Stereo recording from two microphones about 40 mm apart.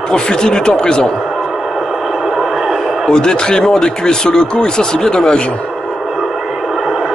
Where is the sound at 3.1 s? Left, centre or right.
Centre.